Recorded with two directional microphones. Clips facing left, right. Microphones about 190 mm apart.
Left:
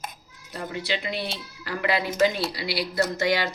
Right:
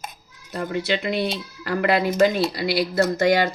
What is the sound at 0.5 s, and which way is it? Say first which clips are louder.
Speech: right 6 dB; 50° right (ahead or behind).